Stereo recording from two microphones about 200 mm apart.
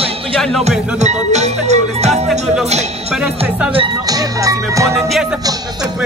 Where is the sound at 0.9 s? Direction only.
35° right (ahead or behind).